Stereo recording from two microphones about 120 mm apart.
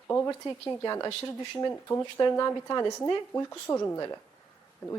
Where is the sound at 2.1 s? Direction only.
30° left (ahead or behind).